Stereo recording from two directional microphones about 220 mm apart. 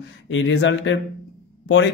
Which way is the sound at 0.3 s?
60° left (ahead or behind).